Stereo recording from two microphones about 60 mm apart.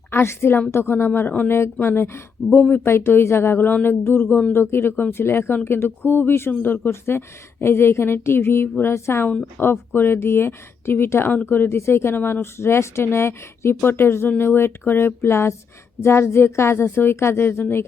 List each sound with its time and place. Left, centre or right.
0.1 s a woman's voice: left
6.9 s speech: left
12.1 s speech: left